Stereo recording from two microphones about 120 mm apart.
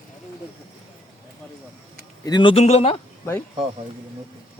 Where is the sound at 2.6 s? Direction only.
60° left (ahead or behind).